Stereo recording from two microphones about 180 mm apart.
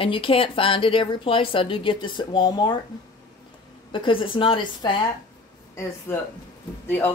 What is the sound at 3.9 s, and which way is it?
A woman's voice, 30° left (ahead or behind).